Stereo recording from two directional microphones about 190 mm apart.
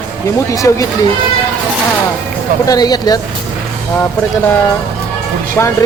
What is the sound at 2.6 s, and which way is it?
Speech, 20° left (ahead or behind).